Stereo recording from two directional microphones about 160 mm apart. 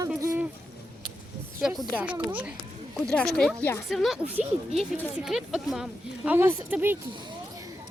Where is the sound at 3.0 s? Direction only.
5° left (ahead or behind); by 7.0 s 10° right (ahead or behind).